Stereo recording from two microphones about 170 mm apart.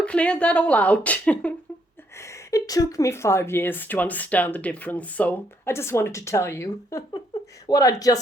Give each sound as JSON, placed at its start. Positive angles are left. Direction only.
{"t": 0.0, "sound": "speech", "side_deg": 5}